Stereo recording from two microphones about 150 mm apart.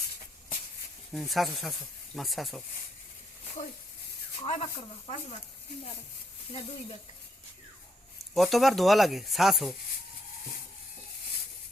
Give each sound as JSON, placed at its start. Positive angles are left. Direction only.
{"t": 1.1, "sound": "speech", "side_deg": 0}
{"t": 4.4, "sound": "speech", "side_deg": 45}
{"t": 8.4, "sound": "speech", "side_deg": 0}